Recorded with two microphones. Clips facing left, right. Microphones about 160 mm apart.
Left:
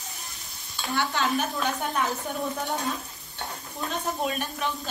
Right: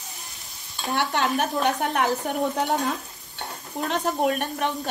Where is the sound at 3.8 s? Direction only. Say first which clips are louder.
Right 6 dB; 60° right (ahead or behind).